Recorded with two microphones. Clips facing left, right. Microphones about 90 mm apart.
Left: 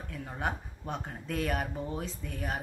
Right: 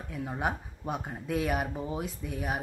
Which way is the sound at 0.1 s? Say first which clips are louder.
Right 3 dB; 10° right (ahead or behind).